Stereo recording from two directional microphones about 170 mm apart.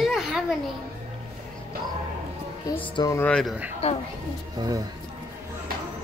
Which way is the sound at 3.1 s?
10° left (ahead or behind).